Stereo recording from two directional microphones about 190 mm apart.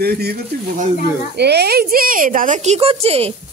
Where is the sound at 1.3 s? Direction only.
60° right (ahead or behind); by 3.3 s 30° right (ahead or behind).